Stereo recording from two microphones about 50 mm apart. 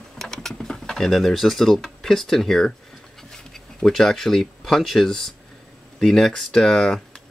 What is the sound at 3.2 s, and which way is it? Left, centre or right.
Speech, centre.